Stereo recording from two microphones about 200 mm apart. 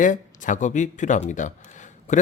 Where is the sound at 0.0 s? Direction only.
40° left (ahead or behind).